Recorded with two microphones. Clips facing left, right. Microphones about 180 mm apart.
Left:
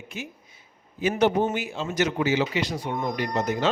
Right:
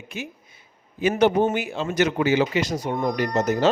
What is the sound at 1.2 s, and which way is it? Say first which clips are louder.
A man's voice: right 3 dB; 55° right (ahead or behind).